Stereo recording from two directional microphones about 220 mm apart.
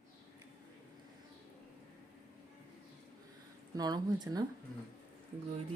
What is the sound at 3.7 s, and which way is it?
Speech, 20° right (ahead or behind).